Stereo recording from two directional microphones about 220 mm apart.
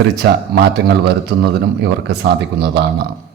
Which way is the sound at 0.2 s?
45° right (ahead or behind).